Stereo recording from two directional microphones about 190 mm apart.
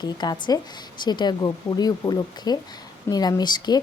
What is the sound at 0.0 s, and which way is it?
A woman's voice, 20° left (ahead or behind).